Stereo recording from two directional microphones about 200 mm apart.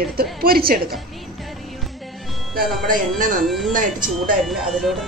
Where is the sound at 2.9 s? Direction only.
40° right (ahead or behind).